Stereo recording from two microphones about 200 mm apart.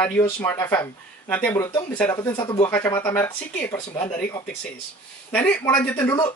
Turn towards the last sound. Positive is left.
turn(degrees=10)  # may be behind; listen again after turning